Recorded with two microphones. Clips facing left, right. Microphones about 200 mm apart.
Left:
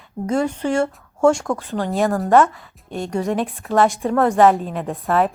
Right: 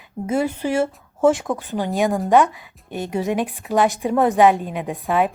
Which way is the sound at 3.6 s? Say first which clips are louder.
Left 1 dB; 15° right (ahead or behind).